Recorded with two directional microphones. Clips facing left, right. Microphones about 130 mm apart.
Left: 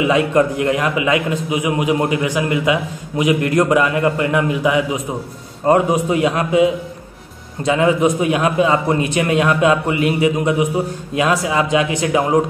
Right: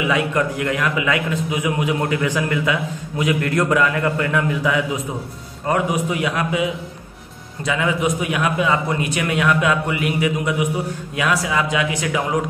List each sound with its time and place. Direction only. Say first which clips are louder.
0.0 s a man's voice: left 5 dB; 25° left (ahead or behind)
5.7 s a man's voice: left 6 dB; 30° left (ahead or behind)